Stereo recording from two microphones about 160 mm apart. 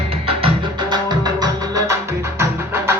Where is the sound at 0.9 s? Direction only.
25° right (ahead or behind).